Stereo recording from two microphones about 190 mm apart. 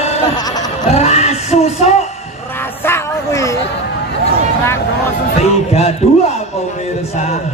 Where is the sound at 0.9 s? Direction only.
35° left (ahead or behind).